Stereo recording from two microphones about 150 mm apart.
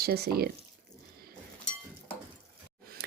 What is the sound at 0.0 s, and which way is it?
Speech, 90° right.